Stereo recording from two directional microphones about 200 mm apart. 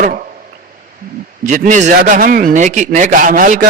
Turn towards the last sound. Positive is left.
turn(degrees=-40)  # may be behind; listen again after turning